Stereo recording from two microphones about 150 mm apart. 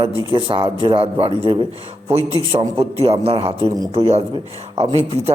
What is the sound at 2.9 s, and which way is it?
Speech, 40° right (ahead or behind).